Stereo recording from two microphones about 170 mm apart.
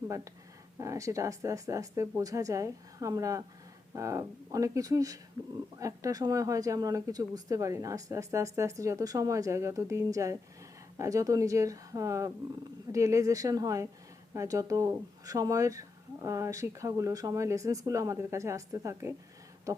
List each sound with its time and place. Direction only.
0.8 s speech: 20° right (ahead or behind)